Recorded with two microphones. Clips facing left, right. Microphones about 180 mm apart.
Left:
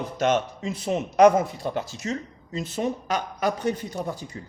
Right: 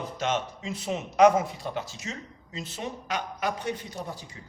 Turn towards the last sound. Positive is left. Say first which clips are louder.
# left 6 dB
turn(degrees=45)  # may be behind; listen again after turning